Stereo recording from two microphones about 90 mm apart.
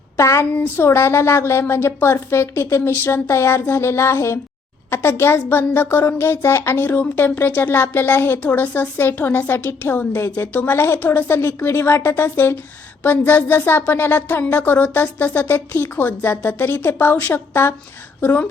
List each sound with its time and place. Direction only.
0.2 s a woman's voice: 35° left (ahead or behind)
0.5 s a woman's voice: 25° left (ahead or behind)